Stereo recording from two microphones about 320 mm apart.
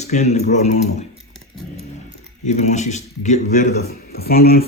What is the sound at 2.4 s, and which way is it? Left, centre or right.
A man's voice, left.